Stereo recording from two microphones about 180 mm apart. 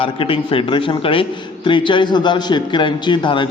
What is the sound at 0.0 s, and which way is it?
A man's voice, 30° left (ahead or behind).